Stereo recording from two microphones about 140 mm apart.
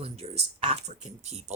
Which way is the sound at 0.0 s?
45° right (ahead or behind).